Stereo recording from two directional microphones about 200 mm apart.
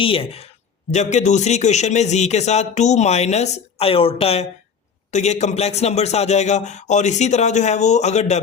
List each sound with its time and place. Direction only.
0.0 s speech: 25° left (ahead or behind)